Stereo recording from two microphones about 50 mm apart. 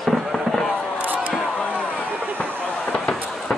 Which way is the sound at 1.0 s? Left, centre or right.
Right.